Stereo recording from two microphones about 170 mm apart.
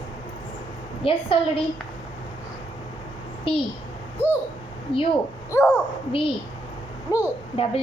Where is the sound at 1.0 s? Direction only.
35° left (ahead or behind).